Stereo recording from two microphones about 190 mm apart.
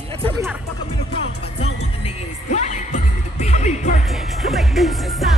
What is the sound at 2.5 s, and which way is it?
Music, 40° left (ahead or behind).